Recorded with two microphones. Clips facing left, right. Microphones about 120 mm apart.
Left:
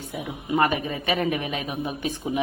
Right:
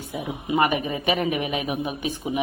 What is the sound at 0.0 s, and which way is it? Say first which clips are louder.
A man's voice: right 2 dB; 15° right (ahead or behind).